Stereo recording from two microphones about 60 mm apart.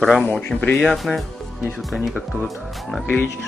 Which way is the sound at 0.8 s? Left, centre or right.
Centre.